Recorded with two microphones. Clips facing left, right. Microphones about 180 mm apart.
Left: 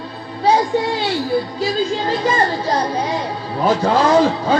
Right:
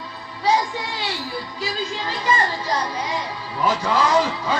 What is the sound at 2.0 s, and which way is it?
A child's voice, 50° left (ahead or behind).